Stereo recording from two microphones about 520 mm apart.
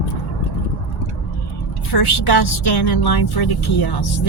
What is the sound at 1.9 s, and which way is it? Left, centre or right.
Speech, left.